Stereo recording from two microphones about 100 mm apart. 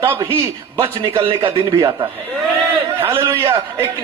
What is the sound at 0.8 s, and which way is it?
Speech, 60° right (ahead or behind).